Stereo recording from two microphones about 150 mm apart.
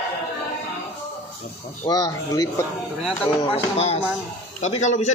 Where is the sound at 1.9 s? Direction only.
25° left (ahead or behind).